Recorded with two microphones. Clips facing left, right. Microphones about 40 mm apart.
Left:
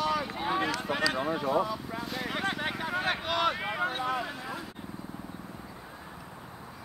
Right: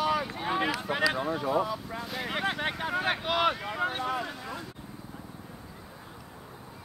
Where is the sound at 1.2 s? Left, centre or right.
Centre.